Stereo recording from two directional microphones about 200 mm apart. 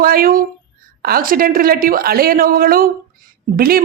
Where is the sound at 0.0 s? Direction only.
45° right (ahead or behind).